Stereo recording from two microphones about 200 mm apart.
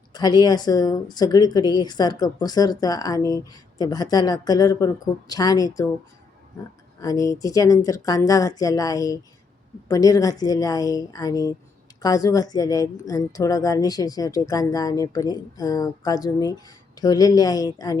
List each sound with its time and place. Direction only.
0.1 s a woman's voice: 20° left (ahead or behind)
7.0 s a woman's voice: 20° left (ahead or behind)